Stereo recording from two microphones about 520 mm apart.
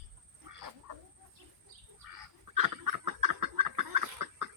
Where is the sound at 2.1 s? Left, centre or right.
Right.